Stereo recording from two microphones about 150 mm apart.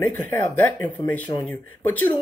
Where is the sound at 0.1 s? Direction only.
15° left (ahead or behind).